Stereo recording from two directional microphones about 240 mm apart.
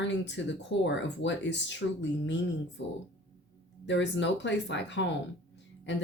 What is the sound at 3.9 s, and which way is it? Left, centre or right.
A woman's voice, left.